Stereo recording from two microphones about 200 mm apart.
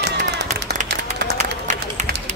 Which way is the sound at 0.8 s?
55° right (ahead or behind).